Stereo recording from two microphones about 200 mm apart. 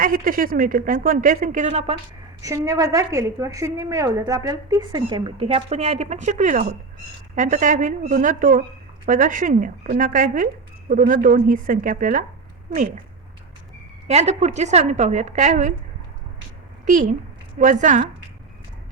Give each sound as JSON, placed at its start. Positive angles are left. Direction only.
{"t": 0.0, "sound": "speech", "side_deg": -45}
{"t": 2.4, "sound": "a woman's voice", "side_deg": -15}
{"t": 14.1, "sound": "a woman's voice", "side_deg": -35}
{"t": 16.8, "sound": "a woman's voice", "side_deg": -40}